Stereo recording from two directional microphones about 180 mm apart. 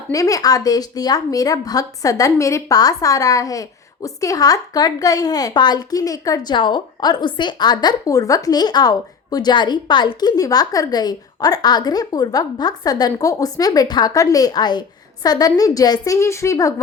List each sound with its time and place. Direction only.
0.1 s a woman's voice: 20° left (ahead or behind)